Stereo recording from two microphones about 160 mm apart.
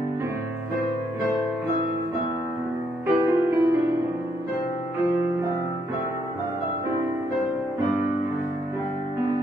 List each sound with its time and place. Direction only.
3.1 s music: 15° right (ahead or behind)